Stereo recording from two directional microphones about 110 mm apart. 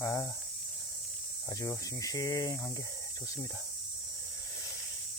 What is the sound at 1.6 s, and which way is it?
Speech, 30° left (ahead or behind).